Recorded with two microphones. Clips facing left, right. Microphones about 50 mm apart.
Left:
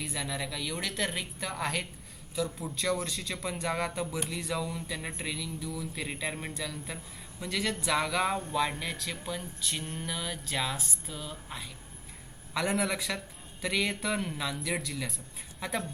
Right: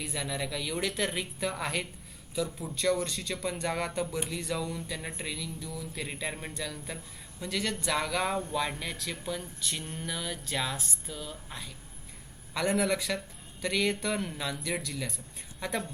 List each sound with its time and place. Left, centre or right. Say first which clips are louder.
0.0 s speech: right 1 dB; centre